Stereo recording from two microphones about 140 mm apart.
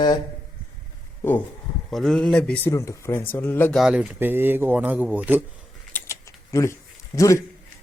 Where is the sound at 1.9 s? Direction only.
Centre (ahead or behind).